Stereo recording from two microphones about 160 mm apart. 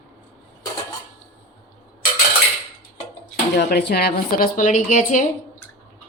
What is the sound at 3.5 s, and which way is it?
A woman's voice, 90° left.